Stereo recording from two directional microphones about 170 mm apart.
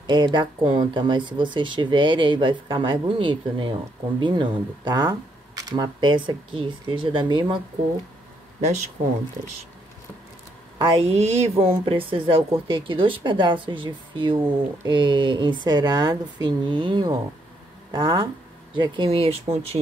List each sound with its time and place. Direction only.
0.0 s speech: 25° right (ahead or behind)
8.5 s speech: 40° right (ahead or behind)
10.8 s speech: 35° right (ahead or behind)